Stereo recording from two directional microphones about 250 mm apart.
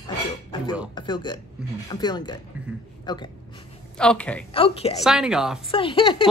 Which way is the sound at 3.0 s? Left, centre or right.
Centre.